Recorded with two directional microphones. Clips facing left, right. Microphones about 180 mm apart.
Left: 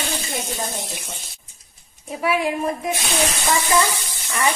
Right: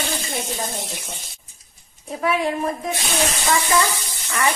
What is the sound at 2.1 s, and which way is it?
A woman's voice, 5° left (ahead or behind).